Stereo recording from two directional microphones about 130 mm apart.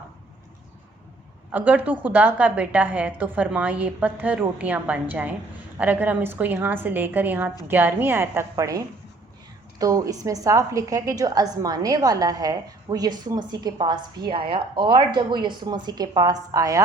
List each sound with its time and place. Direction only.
1.5 s a woman's voice: 15° right (ahead or behind)